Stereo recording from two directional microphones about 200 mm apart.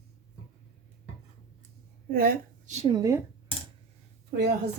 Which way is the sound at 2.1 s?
50° right (ahead or behind).